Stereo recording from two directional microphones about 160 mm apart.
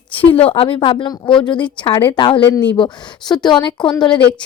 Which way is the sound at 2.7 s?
25° left (ahead or behind).